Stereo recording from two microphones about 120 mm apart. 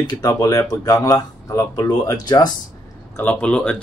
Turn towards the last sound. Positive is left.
turn(degrees=10)  # may be behind; listen again after turning